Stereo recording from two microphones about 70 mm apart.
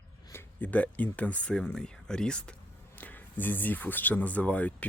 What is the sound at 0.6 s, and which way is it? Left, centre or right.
Speech, left.